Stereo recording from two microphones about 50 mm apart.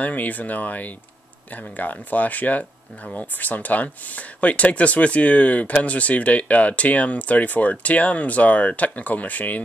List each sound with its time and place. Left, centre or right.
0.0 s speech: left